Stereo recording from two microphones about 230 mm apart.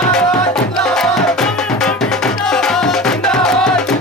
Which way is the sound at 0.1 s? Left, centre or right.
Centre.